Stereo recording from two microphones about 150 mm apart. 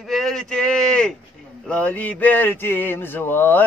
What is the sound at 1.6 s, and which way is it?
Mantra, 10° left (ahead or behind).